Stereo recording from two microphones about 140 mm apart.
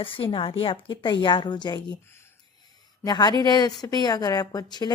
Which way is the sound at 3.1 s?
30° left (ahead or behind).